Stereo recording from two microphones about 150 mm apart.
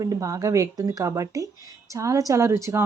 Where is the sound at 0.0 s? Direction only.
25° right (ahead or behind).